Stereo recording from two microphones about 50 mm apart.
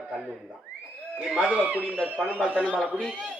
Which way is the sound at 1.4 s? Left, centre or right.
Right.